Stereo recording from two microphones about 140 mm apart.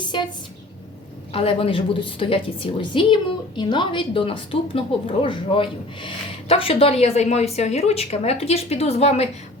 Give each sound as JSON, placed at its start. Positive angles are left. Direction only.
{"t": 1.3, "sound": "a woman's voice", "side_deg": 40}